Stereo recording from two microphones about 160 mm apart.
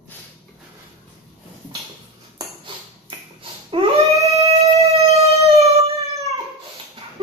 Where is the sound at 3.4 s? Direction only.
35° right (ahead or behind).